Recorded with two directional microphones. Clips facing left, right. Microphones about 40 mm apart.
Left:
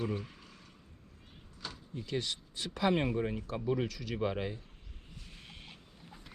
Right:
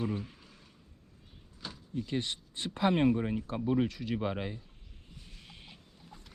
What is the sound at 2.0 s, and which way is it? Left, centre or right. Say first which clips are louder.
Speech: left 1 dB; right.